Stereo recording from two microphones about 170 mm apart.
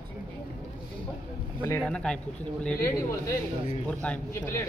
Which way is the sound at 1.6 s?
10° left (ahead or behind).